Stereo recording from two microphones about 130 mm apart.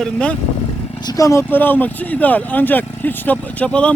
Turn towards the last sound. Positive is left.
turn(degrees=10)  # may be behind; listen again after turning